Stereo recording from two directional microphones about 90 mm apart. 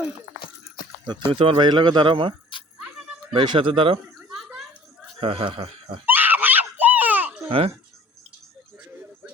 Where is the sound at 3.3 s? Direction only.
60° right (ahead or behind); by 3.9 s 75° right (ahead or behind).